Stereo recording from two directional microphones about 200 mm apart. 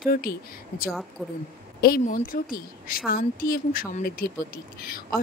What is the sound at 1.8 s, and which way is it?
A woman's voice, 45° left (ahead or behind).